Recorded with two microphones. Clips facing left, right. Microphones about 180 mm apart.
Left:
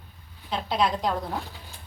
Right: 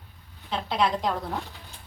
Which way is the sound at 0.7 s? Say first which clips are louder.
Even; 5° left (ahead or behind).